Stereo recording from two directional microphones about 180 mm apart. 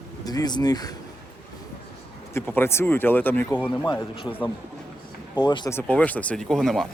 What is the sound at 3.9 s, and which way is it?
Speech, 20° left (ahead or behind).